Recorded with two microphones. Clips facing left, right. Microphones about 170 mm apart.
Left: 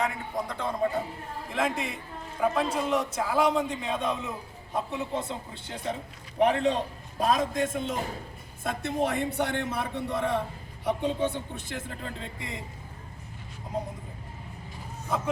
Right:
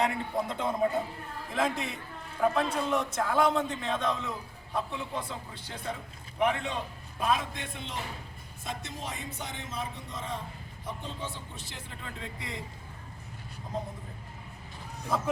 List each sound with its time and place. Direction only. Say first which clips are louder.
0.0 s a man's voice: right 1 dB; 35° right (ahead or behind)
0.5 s speech: even; 20° right (ahead or behind)
1.5 s a man's voice: left 1 dB; 5° left (ahead or behind); by 8.0 s 45° left (ahead or behind)
8.6 s a man's voice: left 10 dB; 55° left (ahead or behind)